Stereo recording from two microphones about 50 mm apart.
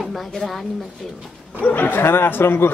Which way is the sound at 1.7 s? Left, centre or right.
Left.